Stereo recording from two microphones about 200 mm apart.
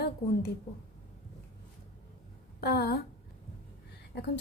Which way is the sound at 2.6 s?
50° left (ahead or behind).